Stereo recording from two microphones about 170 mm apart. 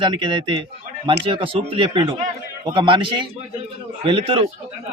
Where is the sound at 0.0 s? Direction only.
30° right (ahead or behind).